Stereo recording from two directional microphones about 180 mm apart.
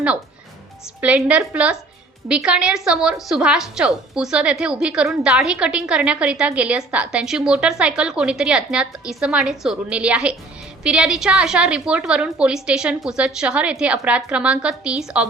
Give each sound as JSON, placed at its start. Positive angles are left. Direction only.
{"t": 1.0, "sound": "a woman's voice", "side_deg": -5}